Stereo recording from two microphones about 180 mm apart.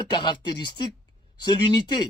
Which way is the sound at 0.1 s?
25° left (ahead or behind).